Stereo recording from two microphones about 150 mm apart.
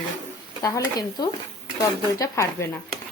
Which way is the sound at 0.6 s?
25° left (ahead or behind).